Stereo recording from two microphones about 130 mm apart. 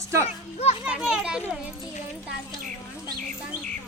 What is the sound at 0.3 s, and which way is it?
Speech, 55° left (ahead or behind).